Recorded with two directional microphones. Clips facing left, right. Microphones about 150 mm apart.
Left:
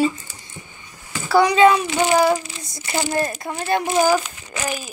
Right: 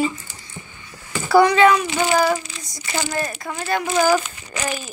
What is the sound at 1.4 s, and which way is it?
Speech, 20° left (ahead or behind).